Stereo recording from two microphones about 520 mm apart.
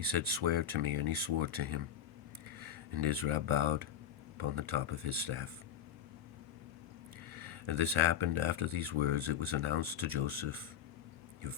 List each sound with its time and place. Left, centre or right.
0.1 s speech: right
7.3 s speech: right